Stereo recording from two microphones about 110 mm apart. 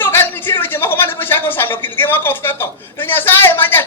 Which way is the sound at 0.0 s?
20° left (ahead or behind).